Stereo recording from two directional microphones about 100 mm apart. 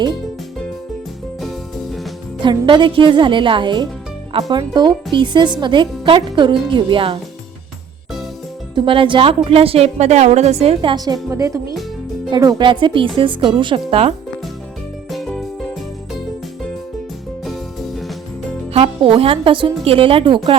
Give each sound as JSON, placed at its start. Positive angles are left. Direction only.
{"t": 1.4, "sound": "music", "side_deg": 0}
{"t": 2.4, "sound": "a woman's voice", "side_deg": -50}
{"t": 8.7, "sound": "a woman's voice", "side_deg": -60}
{"t": 11.3, "sound": "speech", "side_deg": -30}
{"t": 12.3, "sound": "a woman's voice", "side_deg": -45}
{"t": 15.1, "sound": "music", "side_deg": 0}
{"t": 17.4, "sound": "music", "side_deg": 0}
{"t": 18.7, "sound": "a woman's voice", "side_deg": -70}